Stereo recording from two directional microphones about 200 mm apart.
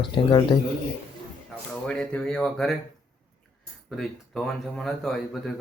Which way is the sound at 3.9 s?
Centre (ahead or behind).